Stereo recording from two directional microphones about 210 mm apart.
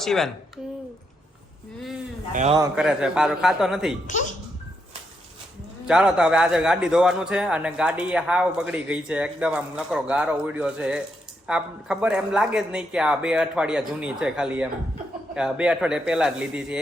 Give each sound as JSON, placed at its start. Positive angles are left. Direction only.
{"t": 0.0, "sound": "speech", "side_deg": 0}
{"t": 2.3, "sound": "a man's voice", "side_deg": -35}
{"t": 2.7, "sound": "a man's voice", "side_deg": -5}
{"t": 4.0, "sound": "speech", "side_deg": 35}
{"t": 5.9, "sound": "a man's voice", "side_deg": -5}